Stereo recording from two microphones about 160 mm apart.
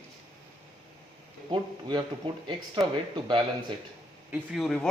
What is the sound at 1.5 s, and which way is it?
Speech, 30° right (ahead or behind).